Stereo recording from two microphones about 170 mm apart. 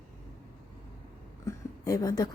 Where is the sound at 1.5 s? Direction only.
20° left (ahead or behind).